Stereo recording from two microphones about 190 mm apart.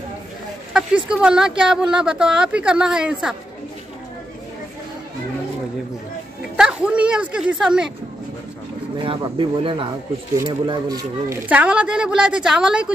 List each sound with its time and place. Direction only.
0.7 s speech: 5° right (ahead or behind)
6.5 s speech: 5° right (ahead or behind)
9.0 s speech: 25° right (ahead or behind); by 12.9 s 5° right (ahead or behind)